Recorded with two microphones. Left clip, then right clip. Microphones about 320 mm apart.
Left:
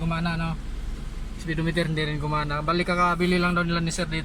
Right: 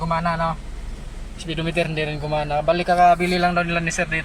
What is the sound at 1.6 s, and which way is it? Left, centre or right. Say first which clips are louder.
Speech: right 5 dB; right.